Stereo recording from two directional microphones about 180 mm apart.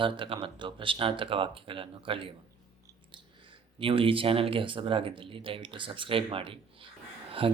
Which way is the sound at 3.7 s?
30° right (ahead or behind).